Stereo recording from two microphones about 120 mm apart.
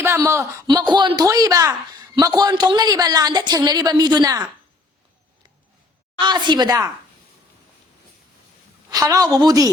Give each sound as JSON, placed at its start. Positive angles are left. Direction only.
{"t": 0.0, "sound": "a woman's voice", "side_deg": -25}
{"t": 6.1, "sound": "a woman's voice", "side_deg": -40}
{"t": 8.9, "sound": "a woman's voice", "side_deg": -30}